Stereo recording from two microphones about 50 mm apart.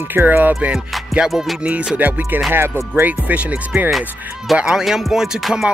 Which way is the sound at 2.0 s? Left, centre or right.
Right.